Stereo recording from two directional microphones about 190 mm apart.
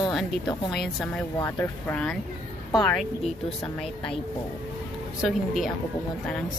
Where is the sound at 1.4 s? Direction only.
15° left (ahead or behind).